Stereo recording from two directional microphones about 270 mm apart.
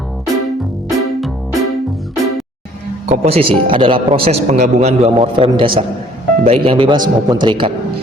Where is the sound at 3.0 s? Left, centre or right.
Right.